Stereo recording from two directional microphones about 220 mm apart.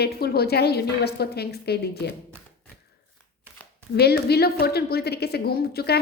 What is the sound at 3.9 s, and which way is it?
A woman's voice, 45° left (ahead or behind).